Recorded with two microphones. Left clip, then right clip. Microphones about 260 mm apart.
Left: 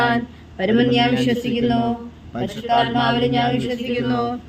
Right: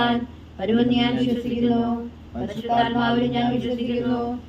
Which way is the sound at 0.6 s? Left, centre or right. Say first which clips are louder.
Left 4 dB; left.